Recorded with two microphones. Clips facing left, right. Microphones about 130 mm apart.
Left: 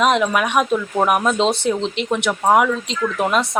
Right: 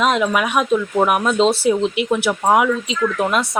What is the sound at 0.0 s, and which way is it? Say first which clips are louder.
A woman's voice: even; centre (ahead or behind).